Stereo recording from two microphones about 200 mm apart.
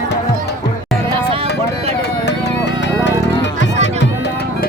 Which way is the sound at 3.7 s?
35° right (ahead or behind).